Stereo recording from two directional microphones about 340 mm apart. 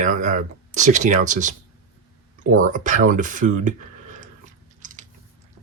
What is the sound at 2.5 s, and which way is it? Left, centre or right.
Speech, right.